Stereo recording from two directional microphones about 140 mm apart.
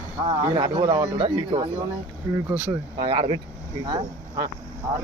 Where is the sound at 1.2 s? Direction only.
40° right (ahead or behind).